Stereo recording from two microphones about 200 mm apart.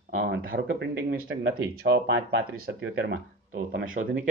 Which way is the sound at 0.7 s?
65° right (ahead or behind).